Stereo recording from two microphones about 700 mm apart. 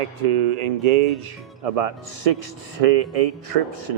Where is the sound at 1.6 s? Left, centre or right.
Right.